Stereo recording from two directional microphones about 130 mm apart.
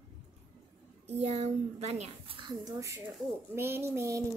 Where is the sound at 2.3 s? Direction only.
30° right (ahead or behind).